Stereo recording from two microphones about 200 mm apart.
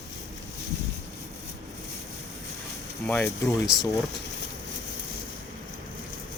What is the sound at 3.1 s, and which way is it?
Speech, 10° left (ahead or behind).